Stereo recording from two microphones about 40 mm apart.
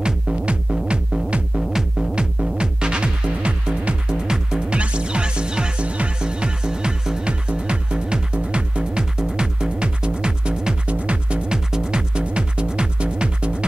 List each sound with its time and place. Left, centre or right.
0.0 s music: right
1.7 s music: centre
2.1 s music: right
11.5 s music: centre